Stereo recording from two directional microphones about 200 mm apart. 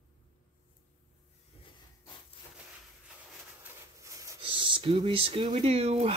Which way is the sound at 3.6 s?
15° right (ahead or behind).